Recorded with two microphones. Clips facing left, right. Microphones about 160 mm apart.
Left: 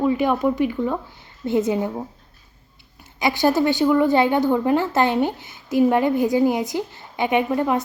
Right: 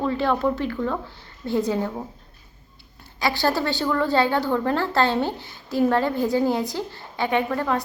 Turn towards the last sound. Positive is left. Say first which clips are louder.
# left 3 dB
turn(degrees=20)  # may be behind; listen again after turning